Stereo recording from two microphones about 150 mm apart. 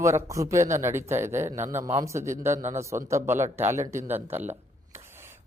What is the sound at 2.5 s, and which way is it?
Speech, 50° right (ahead or behind).